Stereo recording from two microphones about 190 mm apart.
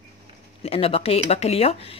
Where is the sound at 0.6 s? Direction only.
30° left (ahead or behind).